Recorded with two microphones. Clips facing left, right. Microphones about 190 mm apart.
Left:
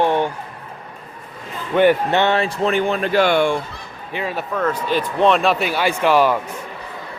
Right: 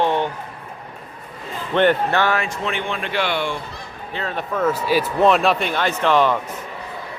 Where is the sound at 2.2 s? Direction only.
25° left (ahead or behind); by 3.5 s 50° left (ahead or behind).